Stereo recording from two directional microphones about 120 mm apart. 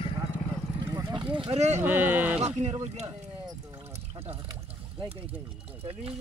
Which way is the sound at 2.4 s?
65° right (ahead or behind).